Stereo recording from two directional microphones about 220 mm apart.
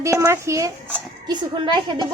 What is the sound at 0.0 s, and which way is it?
A child's voice, 15° right (ahead or behind).